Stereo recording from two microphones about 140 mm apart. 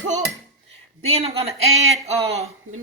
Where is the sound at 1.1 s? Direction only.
45° right (ahead or behind).